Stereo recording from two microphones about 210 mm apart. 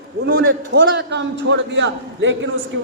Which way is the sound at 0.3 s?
55° right (ahead or behind).